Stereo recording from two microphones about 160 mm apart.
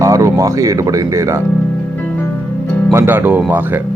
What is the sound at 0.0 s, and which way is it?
Speech, 20° right (ahead or behind).